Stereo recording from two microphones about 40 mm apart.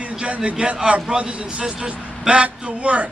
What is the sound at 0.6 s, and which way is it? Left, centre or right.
A man's voice, right.